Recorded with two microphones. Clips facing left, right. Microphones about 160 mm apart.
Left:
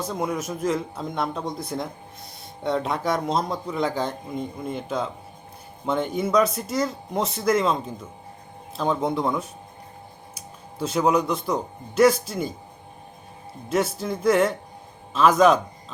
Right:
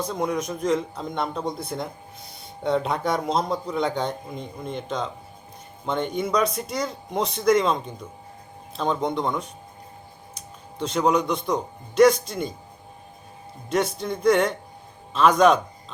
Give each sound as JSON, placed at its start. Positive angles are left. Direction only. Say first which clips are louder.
{"t": 0.0, "sound": "a man's voice", "louder": "right 1 dB", "side_deg": 5}
{"t": 13.7, "sound": "a man's voice", "louder": "even", "side_deg": 5}